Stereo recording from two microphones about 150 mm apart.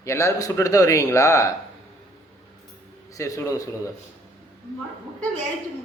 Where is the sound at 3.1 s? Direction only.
20° left (ahead or behind).